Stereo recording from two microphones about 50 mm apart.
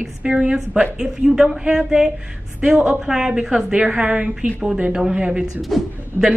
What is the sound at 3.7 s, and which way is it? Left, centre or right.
A woman's voice, centre.